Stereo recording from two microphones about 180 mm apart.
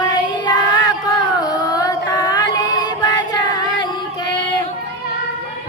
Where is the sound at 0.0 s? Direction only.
20° left (ahead or behind).